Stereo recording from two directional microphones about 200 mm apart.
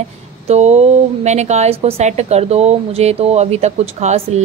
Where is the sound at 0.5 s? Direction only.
35° right (ahead or behind).